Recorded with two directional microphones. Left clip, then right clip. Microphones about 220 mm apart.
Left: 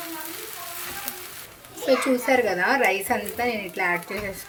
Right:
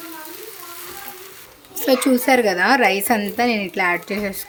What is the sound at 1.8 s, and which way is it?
A woman's voice, 50° right (ahead or behind).